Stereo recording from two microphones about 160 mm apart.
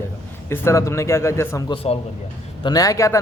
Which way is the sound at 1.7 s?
35° left (ahead or behind).